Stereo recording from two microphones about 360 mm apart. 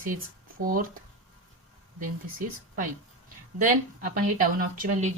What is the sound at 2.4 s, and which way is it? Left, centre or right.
Speech, right.